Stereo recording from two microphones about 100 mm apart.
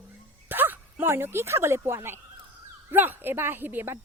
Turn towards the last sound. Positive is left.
turn(degrees=-25)  # may be behind; listen again after turning